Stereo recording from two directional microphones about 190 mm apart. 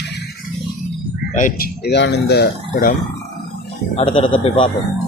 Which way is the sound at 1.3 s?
45° left (ahead or behind).